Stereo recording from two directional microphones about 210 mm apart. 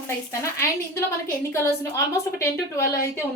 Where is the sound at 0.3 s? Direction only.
15° left (ahead or behind).